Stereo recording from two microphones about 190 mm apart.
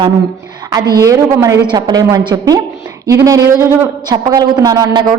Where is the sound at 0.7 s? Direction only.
20° right (ahead or behind).